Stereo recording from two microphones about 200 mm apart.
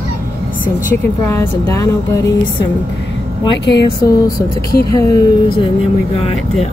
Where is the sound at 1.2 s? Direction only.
15° left (ahead or behind).